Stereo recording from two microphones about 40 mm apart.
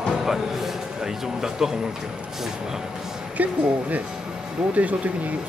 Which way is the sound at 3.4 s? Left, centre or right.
Right.